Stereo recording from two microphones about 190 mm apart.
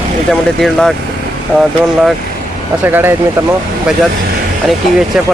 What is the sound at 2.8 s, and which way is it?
Speech, 10° right (ahead or behind).